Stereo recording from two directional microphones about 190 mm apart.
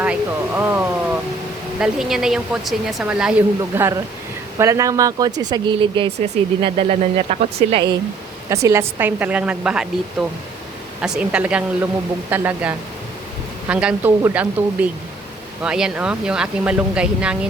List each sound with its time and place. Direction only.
0.0 s a sound: 10° right (ahead or behind)
1.8 s speech: centre (ahead or behind); by 7.9 s 25° right (ahead or behind)
8.4 s speech: 15° right (ahead or behind)